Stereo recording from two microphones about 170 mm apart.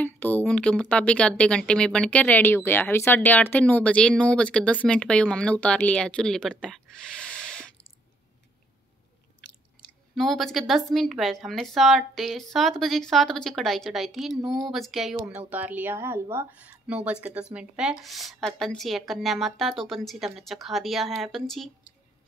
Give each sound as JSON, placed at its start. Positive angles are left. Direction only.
{"t": 0.0, "sound": "speech", "side_deg": 10}
{"t": 10.1, "sound": "speech", "side_deg": 0}